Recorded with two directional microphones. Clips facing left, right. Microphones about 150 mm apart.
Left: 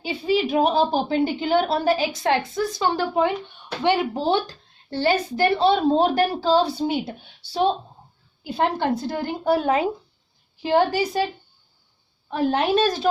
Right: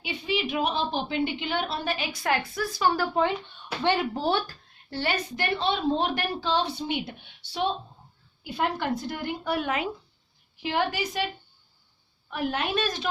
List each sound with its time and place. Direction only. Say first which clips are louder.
0.0 s a woman's voice: left 7 dB; 35° left (ahead or behind)
12.3 s a woman's voice: left 8 dB; 30° left (ahead or behind)